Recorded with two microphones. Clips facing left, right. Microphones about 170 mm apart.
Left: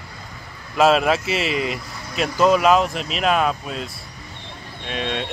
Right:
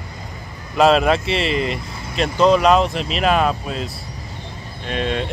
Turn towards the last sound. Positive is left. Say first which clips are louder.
# right 4 dB
turn(degrees=0)  # may be behind; listen again after turning